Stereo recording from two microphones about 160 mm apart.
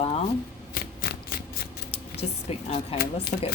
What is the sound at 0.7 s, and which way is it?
Shuffling cards, 65° left (ahead or behind).